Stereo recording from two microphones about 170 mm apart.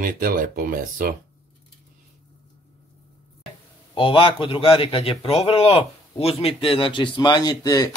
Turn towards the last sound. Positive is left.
turn(degrees=20)  # may be behind; listen again after turning